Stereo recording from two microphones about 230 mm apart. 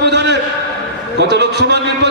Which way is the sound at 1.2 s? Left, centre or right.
Right.